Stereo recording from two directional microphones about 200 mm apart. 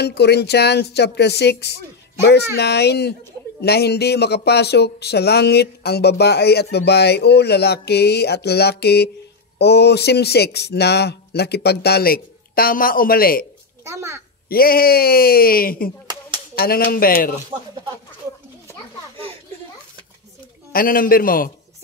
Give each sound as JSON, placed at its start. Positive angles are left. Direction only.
{"t": 0.0, "sound": "speech", "side_deg": 55}
{"t": 13.8, "sound": "a child's voice", "side_deg": -15}
{"t": 14.5, "sound": "speech", "side_deg": 50}
{"t": 20.7, "sound": "speech", "side_deg": 45}